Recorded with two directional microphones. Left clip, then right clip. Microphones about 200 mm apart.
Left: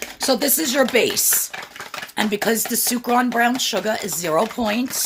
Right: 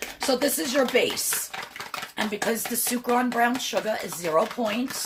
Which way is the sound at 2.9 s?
45° left (ahead or behind).